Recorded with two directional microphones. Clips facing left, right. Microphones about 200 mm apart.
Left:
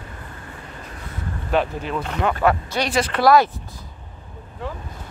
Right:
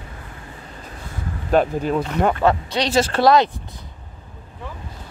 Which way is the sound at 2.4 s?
25° right (ahead or behind).